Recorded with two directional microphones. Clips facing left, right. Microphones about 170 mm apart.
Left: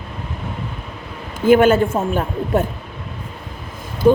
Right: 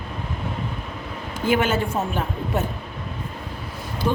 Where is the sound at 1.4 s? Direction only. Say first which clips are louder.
Left 9 dB; 50° left (ahead or behind).